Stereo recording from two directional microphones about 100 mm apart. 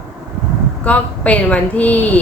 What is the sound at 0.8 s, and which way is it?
A woman's voice, 15° left (ahead or behind).